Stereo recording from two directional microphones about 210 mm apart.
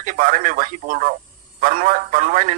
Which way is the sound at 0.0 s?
35° right (ahead or behind).